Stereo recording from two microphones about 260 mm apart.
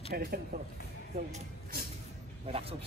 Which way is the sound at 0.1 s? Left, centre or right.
Right.